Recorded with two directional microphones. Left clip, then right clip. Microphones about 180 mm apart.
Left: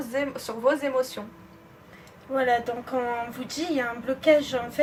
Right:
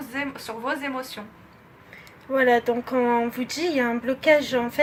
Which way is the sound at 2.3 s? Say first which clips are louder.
Right 4 dB; 40° right (ahead or behind).